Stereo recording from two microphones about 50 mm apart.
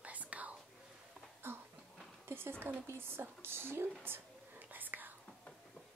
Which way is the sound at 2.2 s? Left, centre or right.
Right.